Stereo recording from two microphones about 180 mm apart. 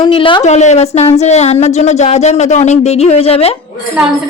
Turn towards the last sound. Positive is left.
turn(degrees=35)  # may be behind; listen again after turning